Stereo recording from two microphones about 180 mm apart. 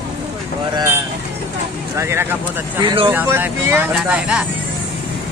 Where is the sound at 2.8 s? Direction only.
25° right (ahead or behind).